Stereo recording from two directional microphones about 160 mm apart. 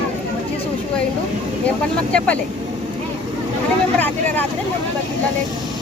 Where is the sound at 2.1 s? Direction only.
10° left (ahead or behind).